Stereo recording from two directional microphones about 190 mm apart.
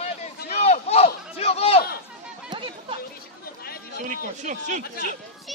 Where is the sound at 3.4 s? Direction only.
55° left (ahead or behind).